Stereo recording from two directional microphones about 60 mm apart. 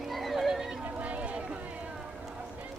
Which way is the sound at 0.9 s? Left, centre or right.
Right.